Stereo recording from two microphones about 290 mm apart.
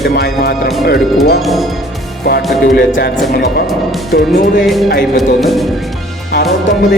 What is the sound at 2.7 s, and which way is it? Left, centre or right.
Speech, left.